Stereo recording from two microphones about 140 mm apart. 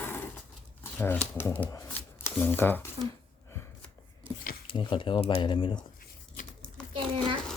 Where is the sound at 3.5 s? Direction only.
20° left (ahead or behind).